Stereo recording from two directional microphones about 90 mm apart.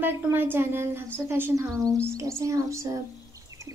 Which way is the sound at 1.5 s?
40° right (ahead or behind).